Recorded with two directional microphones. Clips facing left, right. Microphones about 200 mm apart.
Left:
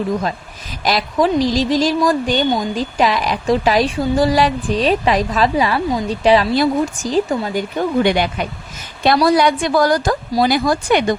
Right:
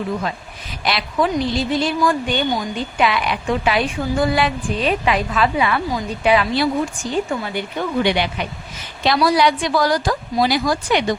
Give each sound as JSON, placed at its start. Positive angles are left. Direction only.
{"t": 0.9, "sound": "a woman's voice", "side_deg": 40}